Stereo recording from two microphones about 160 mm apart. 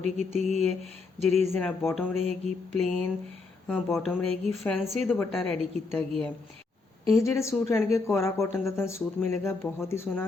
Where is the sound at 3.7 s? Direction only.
5° left (ahead or behind).